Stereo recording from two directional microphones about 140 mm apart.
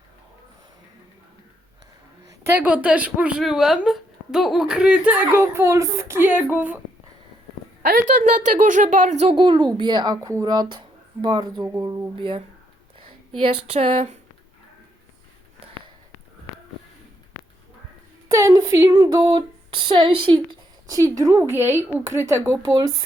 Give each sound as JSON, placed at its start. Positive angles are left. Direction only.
{"t": 2.2, "sound": "speech", "side_deg": -20}
{"t": 7.8, "sound": "speech", "side_deg": -70}
{"t": 9.3, "sound": "speech", "side_deg": -35}
{"t": 13.7, "sound": "speech", "side_deg": -50}
{"t": 18.3, "sound": "a woman's voice", "side_deg": -20}
{"t": 21.0, "sound": "a woman's voice", "side_deg": -20}